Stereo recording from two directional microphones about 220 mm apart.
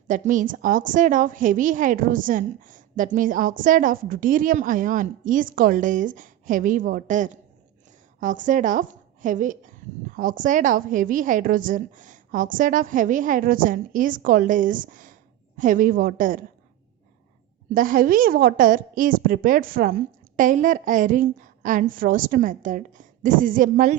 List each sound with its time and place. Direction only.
0.1 s a woman's voice: 35° right (ahead or behind)
17.7 s a woman's voice: 40° right (ahead or behind)